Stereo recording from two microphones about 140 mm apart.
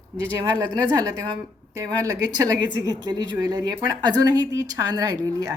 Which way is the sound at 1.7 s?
25° right (ahead or behind).